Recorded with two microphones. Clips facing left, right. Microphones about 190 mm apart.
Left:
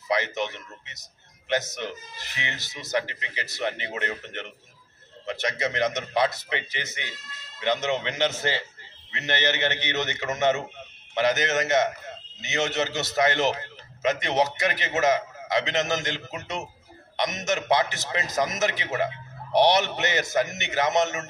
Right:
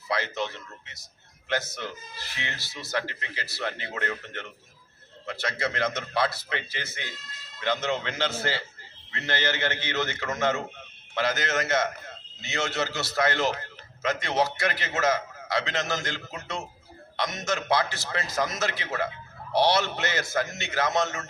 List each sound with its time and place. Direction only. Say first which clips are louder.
0.1 s a man's voice: left 3 dB; 20° left (ahead or behind)